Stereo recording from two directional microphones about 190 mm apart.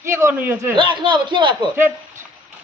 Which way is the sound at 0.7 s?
25° right (ahead or behind).